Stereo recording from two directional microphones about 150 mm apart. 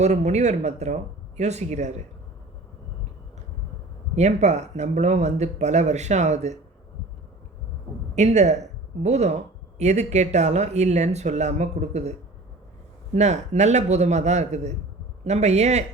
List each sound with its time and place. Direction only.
0.0 s speech: 50° right (ahead or behind)
4.1 s speech: 50° right (ahead or behind)
8.1 s speech: 50° right (ahead or behind)
13.1 s speech: 50° right (ahead or behind)